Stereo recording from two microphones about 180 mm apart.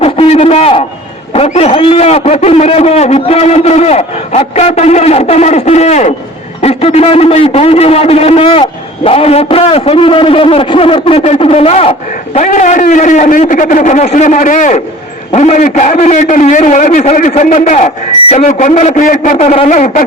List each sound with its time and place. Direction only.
0.0 s a sound: 35° left (ahead or behind)
1.3 s a man's voice: 35° left (ahead or behind)
12.3 s a man's voice: 45° left (ahead or behind)